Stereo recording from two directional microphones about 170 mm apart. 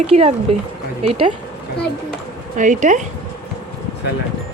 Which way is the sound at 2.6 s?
50° right (ahead or behind).